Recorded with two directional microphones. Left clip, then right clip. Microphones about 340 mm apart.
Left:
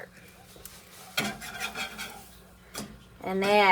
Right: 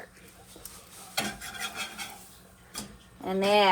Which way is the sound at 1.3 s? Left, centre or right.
Centre.